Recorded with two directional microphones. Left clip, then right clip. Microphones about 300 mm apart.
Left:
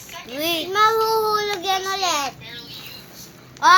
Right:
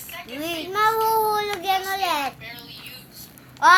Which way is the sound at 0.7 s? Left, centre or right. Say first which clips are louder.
Left 2 dB; centre.